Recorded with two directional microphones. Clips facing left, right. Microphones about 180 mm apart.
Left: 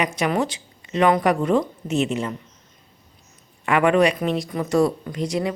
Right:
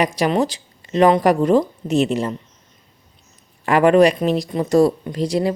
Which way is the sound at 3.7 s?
35° right (ahead or behind).